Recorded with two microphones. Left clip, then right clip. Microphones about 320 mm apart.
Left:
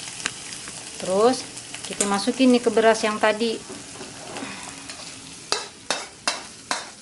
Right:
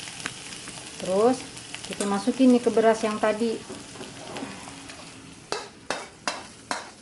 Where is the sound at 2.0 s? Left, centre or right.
Centre.